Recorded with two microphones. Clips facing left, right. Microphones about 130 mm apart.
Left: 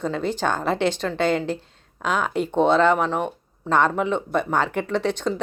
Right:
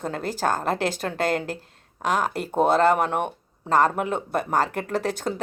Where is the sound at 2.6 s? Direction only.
45° right (ahead or behind).